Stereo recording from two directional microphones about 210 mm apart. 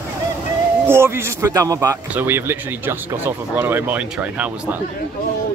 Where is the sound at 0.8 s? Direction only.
10° right (ahead or behind).